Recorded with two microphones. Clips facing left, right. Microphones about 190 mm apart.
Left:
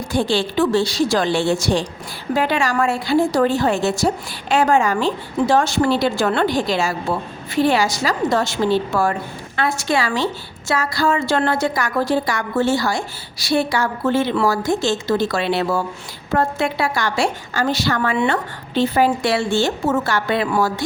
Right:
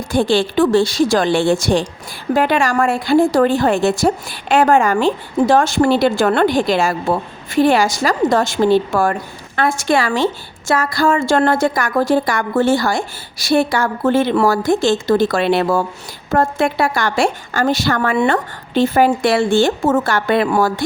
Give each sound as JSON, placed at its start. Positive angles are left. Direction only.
{"t": 0.1, "sound": "a woman's voice", "side_deg": -50}